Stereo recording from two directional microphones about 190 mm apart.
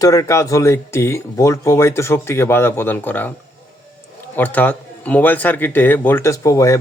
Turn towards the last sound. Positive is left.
turn(degrees=15)  # may be behind; listen again after turning